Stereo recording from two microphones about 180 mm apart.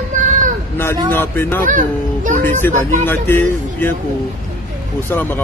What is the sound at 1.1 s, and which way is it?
Speech, 10° left (ahead or behind).